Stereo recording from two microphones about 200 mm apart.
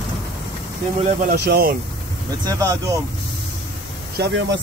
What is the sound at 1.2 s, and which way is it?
Speech, 55° right (ahead or behind).